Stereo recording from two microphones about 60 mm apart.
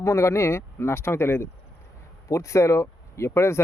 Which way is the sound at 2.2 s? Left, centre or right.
Left.